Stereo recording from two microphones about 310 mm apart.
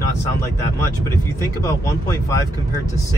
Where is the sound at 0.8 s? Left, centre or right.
Centre.